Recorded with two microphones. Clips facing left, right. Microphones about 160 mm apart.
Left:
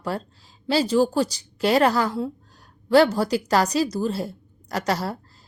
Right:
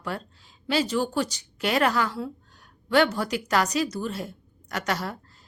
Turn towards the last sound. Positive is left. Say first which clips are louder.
# left 4 dB
turn(degrees=35)  # may be behind; listen again after turning